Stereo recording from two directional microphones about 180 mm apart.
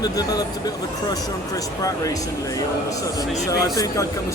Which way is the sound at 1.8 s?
20° left (ahead or behind).